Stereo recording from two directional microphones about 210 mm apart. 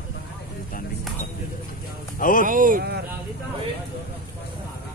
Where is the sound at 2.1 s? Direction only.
40° left (ahead or behind).